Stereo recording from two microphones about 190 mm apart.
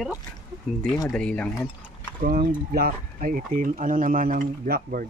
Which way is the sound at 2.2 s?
50° right (ahead or behind).